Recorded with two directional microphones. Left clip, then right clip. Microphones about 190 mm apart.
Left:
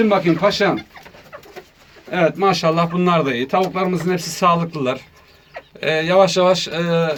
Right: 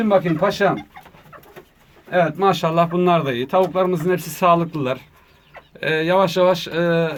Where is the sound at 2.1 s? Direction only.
50° right (ahead or behind).